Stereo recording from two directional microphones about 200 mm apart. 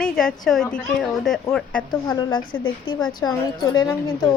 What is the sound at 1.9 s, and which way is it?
A woman's voice, 20° left (ahead or behind).